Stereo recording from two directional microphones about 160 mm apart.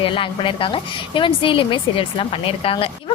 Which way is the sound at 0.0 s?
30° left (ahead or behind).